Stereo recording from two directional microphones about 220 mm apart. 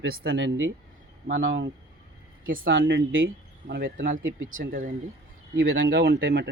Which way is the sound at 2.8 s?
45° right (ahead or behind).